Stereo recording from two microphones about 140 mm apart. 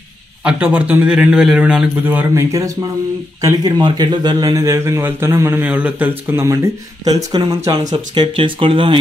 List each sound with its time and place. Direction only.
0.4 s a man's voice: 10° right (ahead or behind)
7.4 s speech: 35° right (ahead or behind)